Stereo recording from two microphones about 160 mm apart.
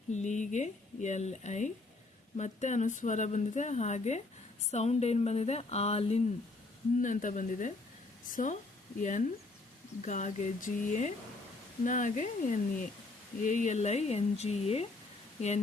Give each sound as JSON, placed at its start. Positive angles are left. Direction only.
{"t": 0.1, "sound": "speech", "side_deg": 50}
{"t": 7.0, "sound": "speech", "side_deg": 55}